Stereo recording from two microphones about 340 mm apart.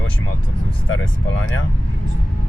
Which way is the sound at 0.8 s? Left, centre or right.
Left.